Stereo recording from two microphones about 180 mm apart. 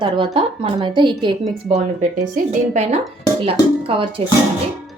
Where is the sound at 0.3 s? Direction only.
25° right (ahead or behind).